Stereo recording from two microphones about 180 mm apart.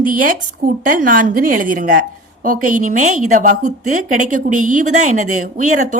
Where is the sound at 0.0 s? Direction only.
50° right (ahead or behind).